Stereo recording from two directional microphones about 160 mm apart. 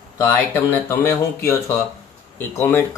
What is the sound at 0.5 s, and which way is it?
Speech, 10° left (ahead or behind).